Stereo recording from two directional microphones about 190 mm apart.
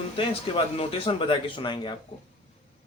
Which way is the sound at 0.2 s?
30° left (ahead or behind).